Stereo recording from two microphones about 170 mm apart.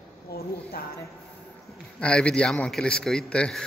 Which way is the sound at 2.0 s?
5° left (ahead or behind).